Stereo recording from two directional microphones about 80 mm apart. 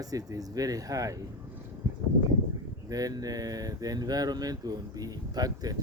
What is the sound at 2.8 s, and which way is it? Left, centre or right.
Speech, right.